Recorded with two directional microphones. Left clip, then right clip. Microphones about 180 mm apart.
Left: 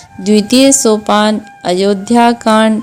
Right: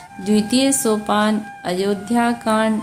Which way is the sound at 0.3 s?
40° left (ahead or behind).